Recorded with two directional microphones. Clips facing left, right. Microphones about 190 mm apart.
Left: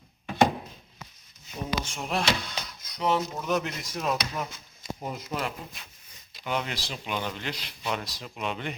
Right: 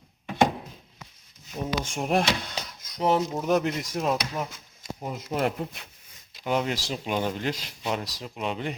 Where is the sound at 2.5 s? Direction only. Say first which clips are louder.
Right 3 dB; 45° right (ahead or behind).